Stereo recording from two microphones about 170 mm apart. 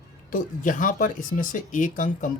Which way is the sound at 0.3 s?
50° left (ahead or behind).